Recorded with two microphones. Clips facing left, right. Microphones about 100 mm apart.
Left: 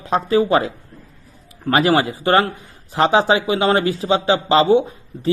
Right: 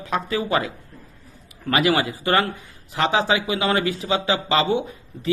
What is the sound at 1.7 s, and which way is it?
A man's voice, 35° left (ahead or behind).